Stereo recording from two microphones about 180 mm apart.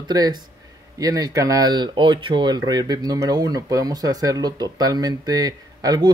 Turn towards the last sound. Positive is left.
turn(degrees=-20)  # may be behind; listen again after turning